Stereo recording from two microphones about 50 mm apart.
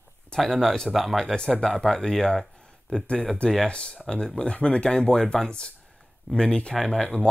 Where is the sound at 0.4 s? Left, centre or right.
Centre.